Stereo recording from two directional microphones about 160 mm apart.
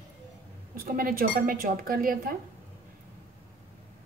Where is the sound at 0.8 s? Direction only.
60° right (ahead or behind).